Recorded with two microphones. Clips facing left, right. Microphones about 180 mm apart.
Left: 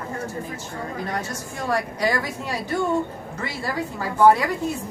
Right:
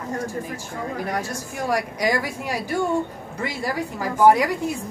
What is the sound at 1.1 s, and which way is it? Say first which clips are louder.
A woman's voice: right 2 dB; 10° right (ahead or behind).